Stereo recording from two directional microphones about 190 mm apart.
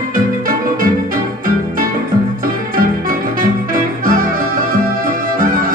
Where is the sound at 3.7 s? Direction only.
45° right (ahead or behind).